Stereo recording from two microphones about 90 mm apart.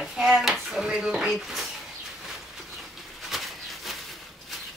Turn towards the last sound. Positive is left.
turn(degrees=0)  # may be behind; listen again after turning